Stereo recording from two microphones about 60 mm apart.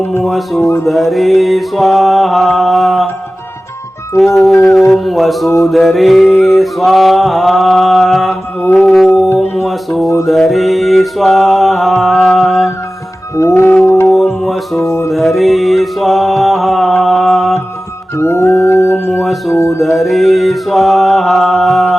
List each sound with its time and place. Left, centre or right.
0.2 s a sound: centre
4.4 s a sound: centre
9.4 s music: centre
10.2 s a sound: centre
13.4 s music: left
13.8 s music: left
14.4 s music: centre
14.8 s music: left
15.1 s mantra: centre
18.2 s music: left
18.9 s music: left
19.2 s speech: centre
19.5 s music: left
19.8 s a sound: centre